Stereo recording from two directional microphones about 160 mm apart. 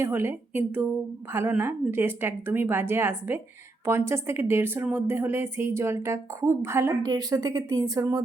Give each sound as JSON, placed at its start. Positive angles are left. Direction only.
{"t": 0.0, "sound": "a woman's voice", "side_deg": -15}